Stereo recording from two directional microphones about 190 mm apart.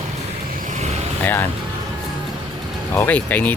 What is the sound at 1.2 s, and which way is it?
Speech, 10° left (ahead or behind).